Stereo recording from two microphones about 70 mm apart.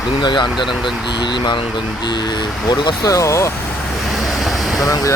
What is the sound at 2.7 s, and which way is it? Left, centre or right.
Speech, left.